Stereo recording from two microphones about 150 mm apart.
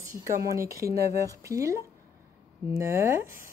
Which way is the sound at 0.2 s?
20° right (ahead or behind).